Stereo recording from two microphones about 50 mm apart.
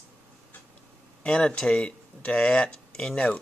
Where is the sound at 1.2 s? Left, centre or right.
Left.